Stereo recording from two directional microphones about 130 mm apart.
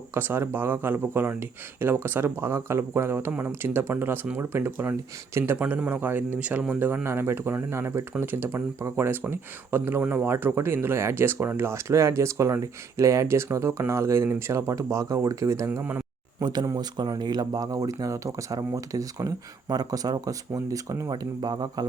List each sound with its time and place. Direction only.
0.1 s speech: 15° right (ahead or behind)
16.4 s speech: 30° right (ahead or behind)